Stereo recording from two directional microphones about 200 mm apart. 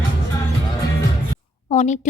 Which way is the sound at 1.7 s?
35° left (ahead or behind).